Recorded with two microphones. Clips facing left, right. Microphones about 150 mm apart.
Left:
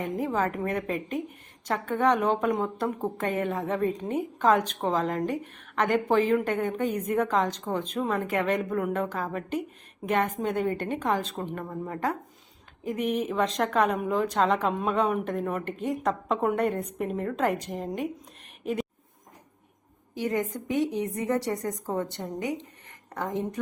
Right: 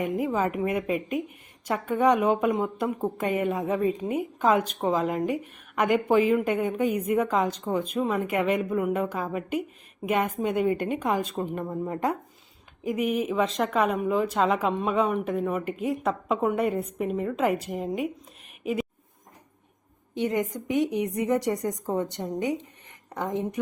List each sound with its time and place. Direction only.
0.0 s a woman's voice: 10° right (ahead or behind)
18.6 s a sound: 5° right (ahead or behind)
20.1 s a woman's voice: 20° right (ahead or behind)